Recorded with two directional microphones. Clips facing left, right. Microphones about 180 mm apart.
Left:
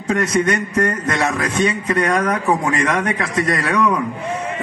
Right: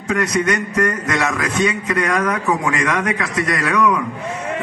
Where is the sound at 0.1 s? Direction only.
30° left (ahead or behind).